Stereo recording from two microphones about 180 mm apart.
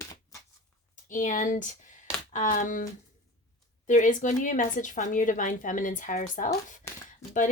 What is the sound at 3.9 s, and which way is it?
A woman's voice, 45° left (ahead or behind).